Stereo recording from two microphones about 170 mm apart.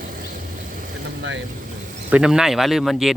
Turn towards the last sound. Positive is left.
turn(degrees=0)  # may be behind; listen again after turning